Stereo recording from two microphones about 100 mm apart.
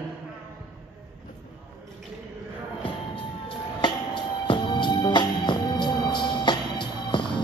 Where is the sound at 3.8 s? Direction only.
50° left (ahead or behind).